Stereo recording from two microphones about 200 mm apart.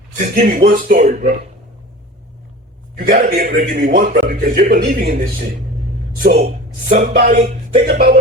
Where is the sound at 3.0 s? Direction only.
45° right (ahead or behind).